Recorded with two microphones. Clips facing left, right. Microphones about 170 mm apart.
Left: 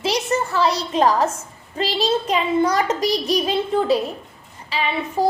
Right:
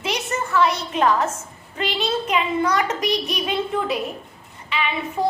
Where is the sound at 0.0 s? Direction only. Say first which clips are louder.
Left 5 dB; 35° left (ahead or behind).